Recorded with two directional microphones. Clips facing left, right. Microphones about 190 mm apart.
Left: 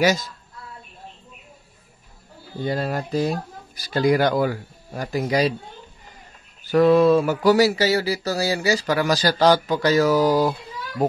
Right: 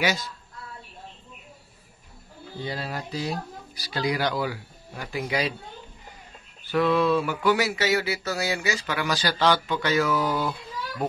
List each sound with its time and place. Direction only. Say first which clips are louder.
0.0 s speech: left 7 dB; 40° left (ahead or behind)
2.6 s speech: left 8 dB; 50° left (ahead or behind)
6.6 s a sound: left 7 dB; 40° left (ahead or behind)